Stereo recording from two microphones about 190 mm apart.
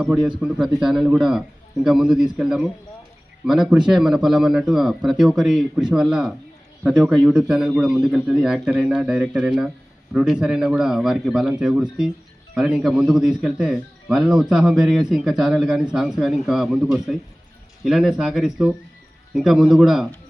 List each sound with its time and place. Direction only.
0.3 s a man's voice: 5° right (ahead or behind)